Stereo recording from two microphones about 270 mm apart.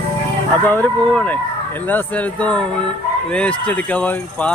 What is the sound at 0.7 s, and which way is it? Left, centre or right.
Speech, centre.